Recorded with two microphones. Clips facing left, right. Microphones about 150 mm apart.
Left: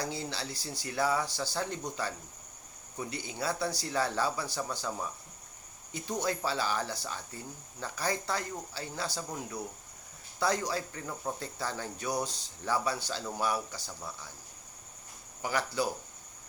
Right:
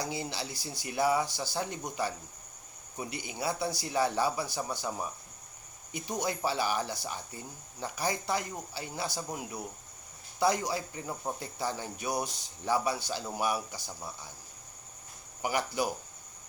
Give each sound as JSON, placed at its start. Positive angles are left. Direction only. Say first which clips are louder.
{"t": 0.0, "sound": "speech", "louder": "right 1 dB", "side_deg": -15}
{"t": 15.4, "sound": "speech", "louder": "right 1 dB", "side_deg": -15}